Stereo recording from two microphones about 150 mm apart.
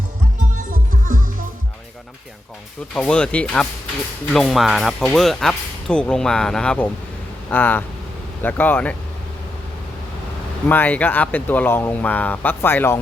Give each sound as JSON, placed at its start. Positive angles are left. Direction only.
{"t": 0.7, "sound": "music", "side_deg": -65}
{"t": 2.9, "sound": "speech", "side_deg": 5}
{"t": 10.7, "sound": "speech", "side_deg": 10}